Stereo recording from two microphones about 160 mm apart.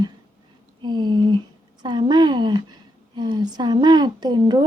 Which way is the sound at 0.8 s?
30° right (ahead or behind).